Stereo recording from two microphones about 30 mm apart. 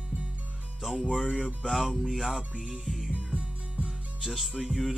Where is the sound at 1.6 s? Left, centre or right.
Centre.